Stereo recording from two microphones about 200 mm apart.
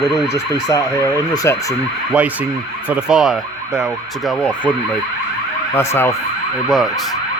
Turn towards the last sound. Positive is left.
turn(degrees=10)  # may be behind; listen again after turning